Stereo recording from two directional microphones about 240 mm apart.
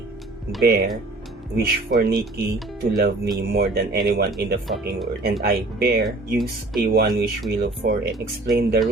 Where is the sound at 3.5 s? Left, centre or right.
Right.